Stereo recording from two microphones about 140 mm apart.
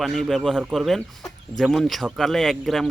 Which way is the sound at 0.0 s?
Centre (ahead or behind).